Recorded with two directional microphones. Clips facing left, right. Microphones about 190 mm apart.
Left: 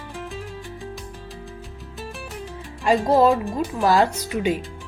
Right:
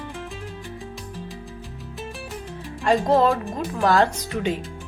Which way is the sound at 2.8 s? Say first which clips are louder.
Left 1 dB; 5° left (ahead or behind).